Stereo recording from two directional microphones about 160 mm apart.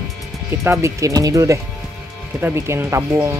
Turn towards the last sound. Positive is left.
turn(degrees=-15)  # may be behind; listen again after turning